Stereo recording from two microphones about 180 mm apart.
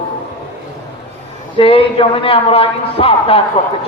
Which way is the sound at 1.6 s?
30° left (ahead or behind).